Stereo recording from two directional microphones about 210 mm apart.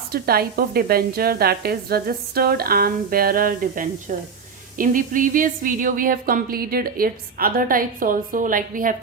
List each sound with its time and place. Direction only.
0.1 s a woman's voice: 45° right (ahead or behind)